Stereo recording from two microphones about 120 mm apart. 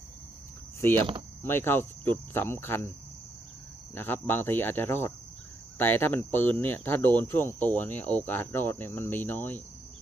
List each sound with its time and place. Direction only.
0.8 s cricket: 20° left (ahead or behind)
3.9 s cricket: 20° left (ahead or behind)
5.7 s speech: 15° left (ahead or behind)